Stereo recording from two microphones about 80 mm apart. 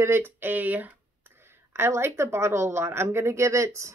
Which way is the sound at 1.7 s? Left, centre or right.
Right.